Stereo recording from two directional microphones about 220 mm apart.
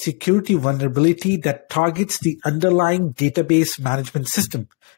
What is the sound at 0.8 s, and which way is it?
Speech, 35° left (ahead or behind).